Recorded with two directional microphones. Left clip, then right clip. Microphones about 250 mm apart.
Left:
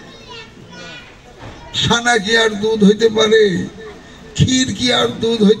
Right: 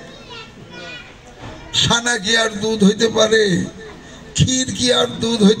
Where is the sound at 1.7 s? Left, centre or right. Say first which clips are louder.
Left 2 dB; right.